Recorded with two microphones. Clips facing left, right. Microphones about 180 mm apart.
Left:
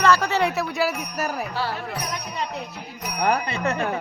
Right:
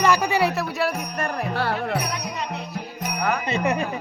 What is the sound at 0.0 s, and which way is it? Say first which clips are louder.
Speech: even; 15° right (ahead or behind).